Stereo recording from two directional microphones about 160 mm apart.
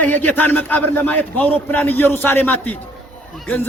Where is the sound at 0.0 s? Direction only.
10° left (ahead or behind).